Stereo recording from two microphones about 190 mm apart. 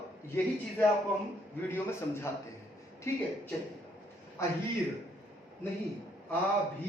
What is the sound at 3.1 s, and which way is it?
Speech, 15° left (ahead or behind).